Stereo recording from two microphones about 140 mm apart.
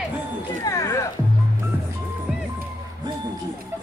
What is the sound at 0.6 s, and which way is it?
Speech, 25° left (ahead or behind).